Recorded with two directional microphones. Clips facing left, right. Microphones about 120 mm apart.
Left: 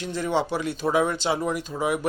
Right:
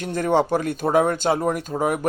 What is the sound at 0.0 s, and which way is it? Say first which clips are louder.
Speech: right 5 dB; 50° right (ahead or behind).